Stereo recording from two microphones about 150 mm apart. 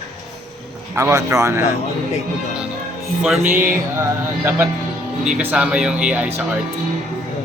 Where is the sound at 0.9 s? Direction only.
20° right (ahead or behind).